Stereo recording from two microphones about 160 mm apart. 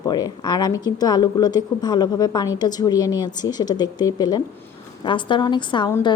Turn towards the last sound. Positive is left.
turn(degrees=30)  # may be behind; listen again after turning